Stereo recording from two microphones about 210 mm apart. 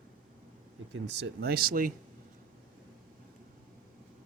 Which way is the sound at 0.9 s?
55° right (ahead or behind).